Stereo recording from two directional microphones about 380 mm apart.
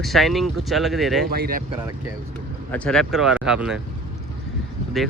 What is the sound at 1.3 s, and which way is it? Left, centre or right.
Speech, right.